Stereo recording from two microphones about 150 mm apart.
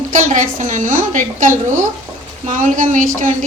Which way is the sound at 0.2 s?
60° right (ahead or behind).